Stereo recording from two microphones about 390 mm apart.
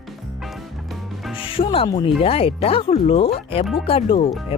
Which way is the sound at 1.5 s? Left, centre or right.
Centre.